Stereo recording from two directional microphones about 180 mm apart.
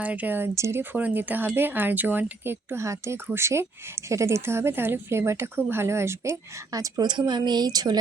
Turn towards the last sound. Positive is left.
turn(degrees=-20)  # may be behind; listen again after turning